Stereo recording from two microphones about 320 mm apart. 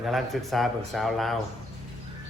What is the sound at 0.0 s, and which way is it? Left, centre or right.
A man's voice, centre.